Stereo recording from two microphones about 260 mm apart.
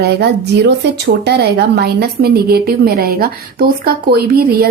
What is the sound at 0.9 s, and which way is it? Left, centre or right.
A woman's voice, right.